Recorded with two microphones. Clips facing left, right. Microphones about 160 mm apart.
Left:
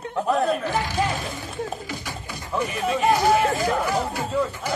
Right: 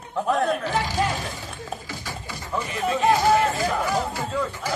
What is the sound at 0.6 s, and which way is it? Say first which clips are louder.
Speech: even; 15° left (ahead or behind).